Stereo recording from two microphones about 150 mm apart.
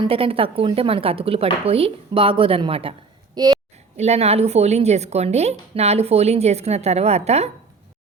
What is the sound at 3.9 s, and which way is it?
A woman's voice, 45° right (ahead or behind).